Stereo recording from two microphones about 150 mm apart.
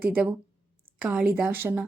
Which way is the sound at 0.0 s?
10° right (ahead or behind).